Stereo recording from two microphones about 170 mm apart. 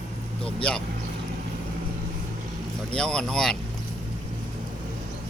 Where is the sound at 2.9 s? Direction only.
5° left (ahead or behind).